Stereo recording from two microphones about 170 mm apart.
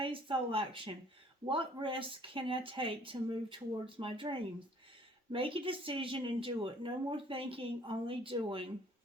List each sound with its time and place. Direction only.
0.0 s speech: 30° right (ahead or behind)